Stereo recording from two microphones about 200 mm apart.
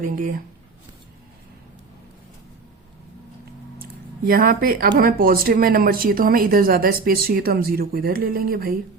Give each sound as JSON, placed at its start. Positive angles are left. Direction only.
{"t": 0.0, "sound": "speech", "side_deg": -45}
{"t": 4.3, "sound": "speech", "side_deg": -45}